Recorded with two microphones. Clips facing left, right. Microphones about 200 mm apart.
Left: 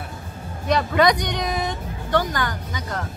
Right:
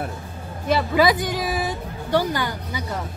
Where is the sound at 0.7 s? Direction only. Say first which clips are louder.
Even; 5° right (ahead or behind).